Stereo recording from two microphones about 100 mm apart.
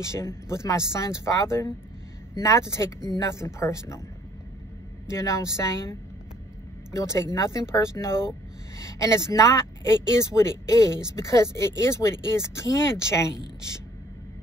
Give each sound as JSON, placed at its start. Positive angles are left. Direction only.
{"t": 0.0, "sound": "speech", "side_deg": 30}
{"t": 5.1, "sound": "a woman's voice", "side_deg": 30}